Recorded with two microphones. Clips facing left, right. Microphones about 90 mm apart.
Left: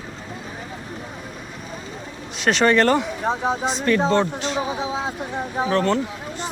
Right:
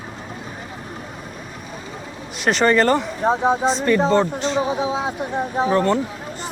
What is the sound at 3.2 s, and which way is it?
Speech, 15° right (ahead or behind).